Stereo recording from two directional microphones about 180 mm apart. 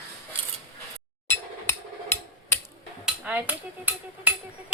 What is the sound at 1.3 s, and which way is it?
Music, 15° left (ahead or behind).